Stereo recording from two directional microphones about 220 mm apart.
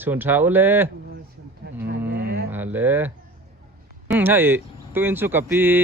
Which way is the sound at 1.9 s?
50° right (ahead or behind).